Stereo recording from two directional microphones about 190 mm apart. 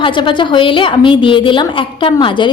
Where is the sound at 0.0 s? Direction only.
25° left (ahead or behind).